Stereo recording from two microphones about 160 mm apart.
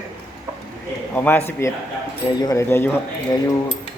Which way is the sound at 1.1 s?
10° left (ahead or behind).